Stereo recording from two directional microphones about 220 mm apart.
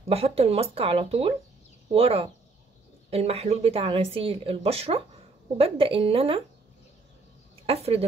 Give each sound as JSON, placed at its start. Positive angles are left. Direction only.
{"t": 0.1, "sound": "speech", "side_deg": -25}
{"t": 7.6, "sound": "speech", "side_deg": -25}